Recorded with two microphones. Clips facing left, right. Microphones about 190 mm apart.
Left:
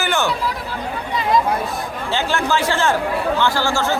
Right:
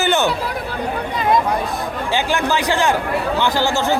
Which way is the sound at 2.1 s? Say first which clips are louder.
Even; 15° right (ahead or behind).